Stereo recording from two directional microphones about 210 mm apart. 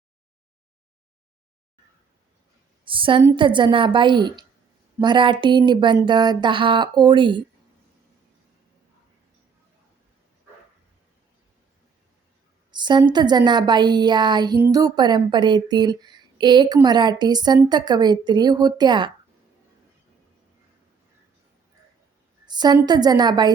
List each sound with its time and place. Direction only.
2.8 s a woman's voice: 25° right (ahead or behind)
12.7 s speech: 20° right (ahead or behind)
22.4 s speech: 20° right (ahead or behind)